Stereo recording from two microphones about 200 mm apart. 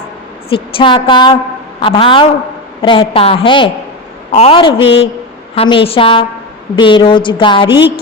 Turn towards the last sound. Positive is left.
turn(degrees=25)  # may be behind; listen again after turning